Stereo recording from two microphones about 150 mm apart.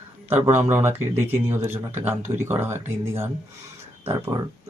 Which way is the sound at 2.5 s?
15° right (ahead or behind).